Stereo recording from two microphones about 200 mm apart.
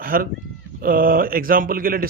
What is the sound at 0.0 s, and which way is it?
Speech, 45° right (ahead or behind).